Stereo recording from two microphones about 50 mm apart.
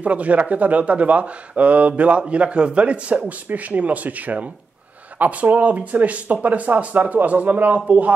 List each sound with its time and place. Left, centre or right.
0.0 s speech: right